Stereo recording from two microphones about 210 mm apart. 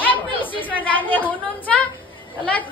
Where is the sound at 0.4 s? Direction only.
25° left (ahead or behind).